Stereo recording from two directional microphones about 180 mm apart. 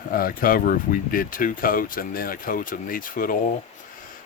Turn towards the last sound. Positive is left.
turn(degrees=50)  # may be behind; listen again after turning